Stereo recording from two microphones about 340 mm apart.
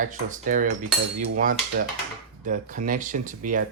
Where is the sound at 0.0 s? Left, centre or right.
Right.